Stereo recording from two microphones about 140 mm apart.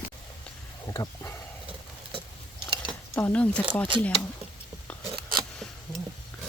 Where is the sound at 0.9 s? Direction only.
20° left (ahead or behind).